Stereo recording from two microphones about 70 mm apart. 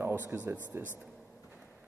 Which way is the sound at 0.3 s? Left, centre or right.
Right.